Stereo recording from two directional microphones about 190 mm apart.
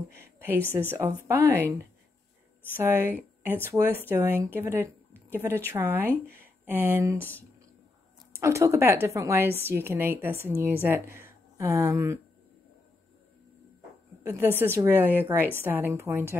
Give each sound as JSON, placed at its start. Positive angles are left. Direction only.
{"t": 0.7, "sound": "a woman's voice", "side_deg": -10}
{"t": 2.7, "sound": "a woman's voice", "side_deg": -10}
{"t": 7.2, "sound": "speech", "side_deg": 10}
{"t": 8.4, "sound": "a woman's voice", "side_deg": -15}
{"t": 14.2, "sound": "a woman's voice", "side_deg": -10}